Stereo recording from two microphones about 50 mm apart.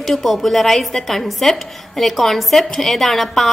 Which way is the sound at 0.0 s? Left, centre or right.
Centre.